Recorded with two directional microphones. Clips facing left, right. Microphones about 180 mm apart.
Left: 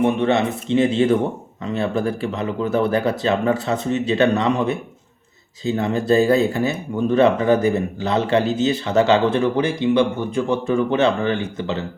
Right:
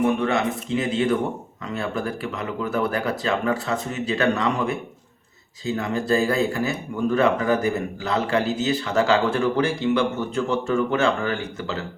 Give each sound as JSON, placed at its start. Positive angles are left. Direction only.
{"t": 0.0, "sound": "speech", "side_deg": 25}